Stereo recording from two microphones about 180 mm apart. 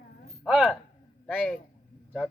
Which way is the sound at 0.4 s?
5° right (ahead or behind).